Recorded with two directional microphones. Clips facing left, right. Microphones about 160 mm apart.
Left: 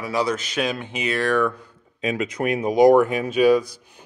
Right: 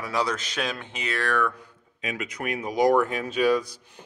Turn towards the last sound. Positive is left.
turn(degrees=10)  # may be behind; listen again after turning